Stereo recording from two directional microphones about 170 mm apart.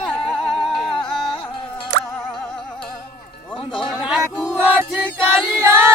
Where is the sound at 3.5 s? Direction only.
30° left (ahead or behind).